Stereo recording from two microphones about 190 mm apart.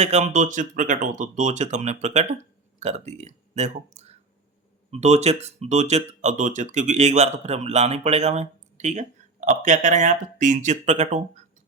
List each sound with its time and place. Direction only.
0.0 s speech: 35° right (ahead or behind)